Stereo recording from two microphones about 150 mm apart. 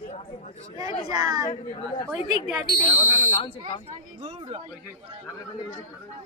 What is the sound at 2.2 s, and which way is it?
Speech, 55° left (ahead or behind).